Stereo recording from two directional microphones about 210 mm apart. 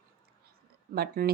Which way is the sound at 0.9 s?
50° right (ahead or behind).